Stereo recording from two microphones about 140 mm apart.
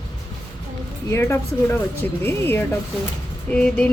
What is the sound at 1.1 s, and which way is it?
Speech, 20° left (ahead or behind).